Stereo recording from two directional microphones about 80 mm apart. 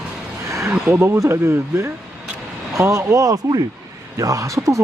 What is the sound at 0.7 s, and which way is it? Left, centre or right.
Speech, right.